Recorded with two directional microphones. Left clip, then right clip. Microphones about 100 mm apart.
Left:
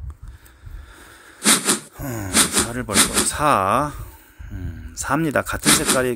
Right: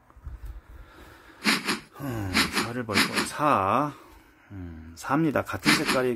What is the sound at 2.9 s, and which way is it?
Speech, 5° left (ahead or behind).